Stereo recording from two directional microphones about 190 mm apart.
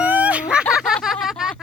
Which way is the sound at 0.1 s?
5° right (ahead or behind).